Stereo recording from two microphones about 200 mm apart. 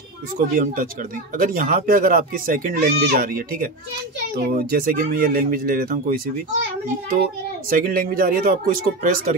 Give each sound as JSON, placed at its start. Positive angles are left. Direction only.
{"t": 0.4, "sound": "speech", "side_deg": -45}
{"t": 7.7, "sound": "speech", "side_deg": -45}